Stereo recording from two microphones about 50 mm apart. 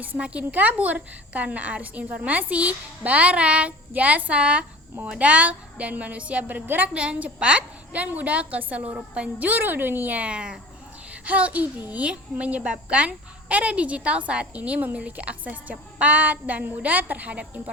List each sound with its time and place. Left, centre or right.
0.2 s a child's voice: right
9.6 s a woman's voice: right
10.2 s a child's voice: right